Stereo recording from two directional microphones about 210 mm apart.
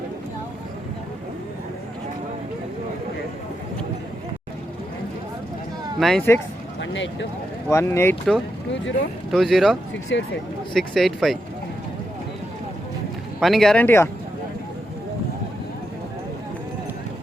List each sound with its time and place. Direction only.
6.0 s speech: centre (ahead or behind)
6.8 s speech: 60° left (ahead or behind)
7.7 s speech: 10° left (ahead or behind)
9.3 s speech: centre (ahead or behind)
10.1 s speech: 55° left (ahead or behind)
10.8 s speech: centre (ahead or behind)
13.4 s speech: centre (ahead or behind)